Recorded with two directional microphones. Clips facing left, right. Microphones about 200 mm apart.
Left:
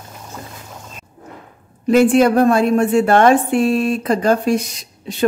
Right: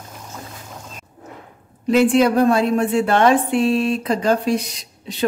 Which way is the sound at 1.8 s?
50° left (ahead or behind).